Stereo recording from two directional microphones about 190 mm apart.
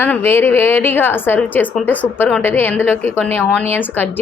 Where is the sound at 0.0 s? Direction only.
10° left (ahead or behind).